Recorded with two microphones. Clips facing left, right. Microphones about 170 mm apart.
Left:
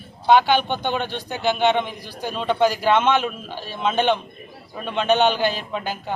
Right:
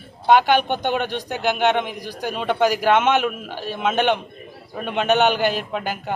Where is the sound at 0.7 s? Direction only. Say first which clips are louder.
Right 2 dB; 10° right (ahead or behind).